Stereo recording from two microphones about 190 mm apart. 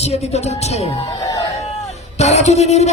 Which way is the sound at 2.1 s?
35° left (ahead or behind).